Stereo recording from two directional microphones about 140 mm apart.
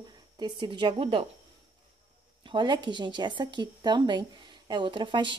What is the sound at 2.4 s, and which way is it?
A woman's voice, 35° right (ahead or behind).